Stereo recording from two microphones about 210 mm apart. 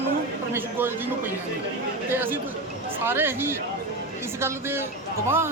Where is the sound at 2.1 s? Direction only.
10° right (ahead or behind).